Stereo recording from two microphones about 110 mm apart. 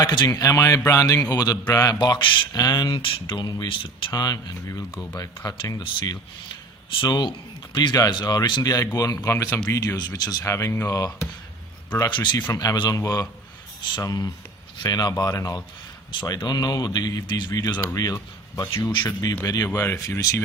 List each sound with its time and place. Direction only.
0.0 s speech: 40° left (ahead or behind)
0.3 s speech: 30° left (ahead or behind)
2.0 s speech: 45° left (ahead or behind)
3.0 s speech: 50° left (ahead or behind); by 5.8 s 35° left (ahead or behind)
6.9 s speech: 45° left (ahead or behind)
8.8 s speech: 30° left (ahead or behind)
10.4 s speech: 25° left (ahead or behind)
11.9 s speech: 40° left (ahead or behind)
12.9 s speech: 30° left (ahead or behind)
17.7 s speech: 30° left (ahead or behind)